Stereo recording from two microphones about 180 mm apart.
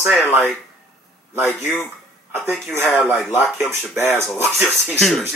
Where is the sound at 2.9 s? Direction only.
Centre (ahead or behind).